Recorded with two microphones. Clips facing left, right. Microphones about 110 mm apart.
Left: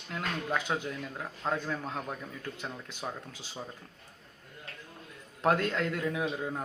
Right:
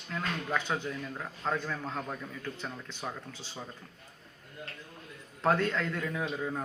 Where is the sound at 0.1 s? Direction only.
15° left (ahead or behind).